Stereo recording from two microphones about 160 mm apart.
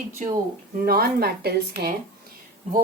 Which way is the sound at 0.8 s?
70° right (ahead or behind).